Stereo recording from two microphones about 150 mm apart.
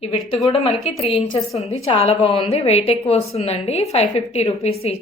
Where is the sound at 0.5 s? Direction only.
40° left (ahead or behind).